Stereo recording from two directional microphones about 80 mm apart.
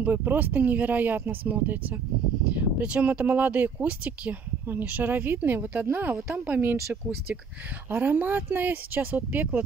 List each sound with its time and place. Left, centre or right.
0.0 s speech: right